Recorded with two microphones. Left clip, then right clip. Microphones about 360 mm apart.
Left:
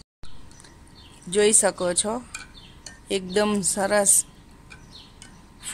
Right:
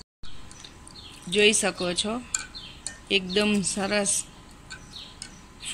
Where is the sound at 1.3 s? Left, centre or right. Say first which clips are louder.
Left 1 dB; left.